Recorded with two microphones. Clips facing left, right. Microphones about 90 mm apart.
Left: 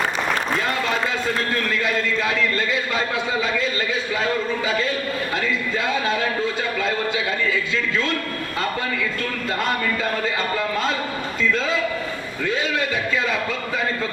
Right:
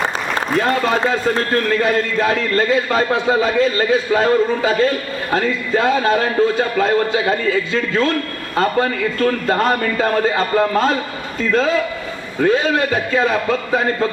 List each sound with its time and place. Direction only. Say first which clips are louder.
0.5 s a man's voice: right 6 dB; 40° right (ahead or behind)